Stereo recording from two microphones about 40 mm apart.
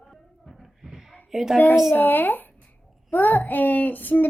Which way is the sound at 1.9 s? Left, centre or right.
Left.